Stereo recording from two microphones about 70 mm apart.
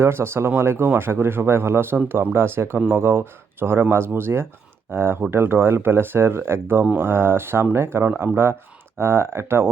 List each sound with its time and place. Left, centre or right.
0.0 s speech: right